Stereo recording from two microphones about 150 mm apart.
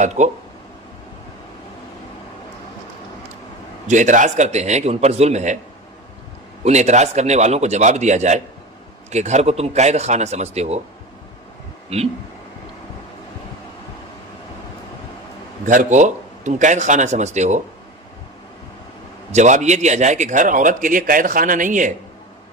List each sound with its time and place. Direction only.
0.0 s speech: 50° right (ahead or behind)
3.8 s speech: 55° right (ahead or behind)
6.6 s speech: 50° right (ahead or behind)
11.9 s speech: 45° right (ahead or behind)
15.6 s speech: 60° right (ahead or behind)
19.3 s a man's voice: 50° right (ahead or behind)